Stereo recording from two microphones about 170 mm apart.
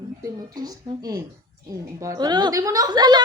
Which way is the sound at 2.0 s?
20° right (ahead or behind).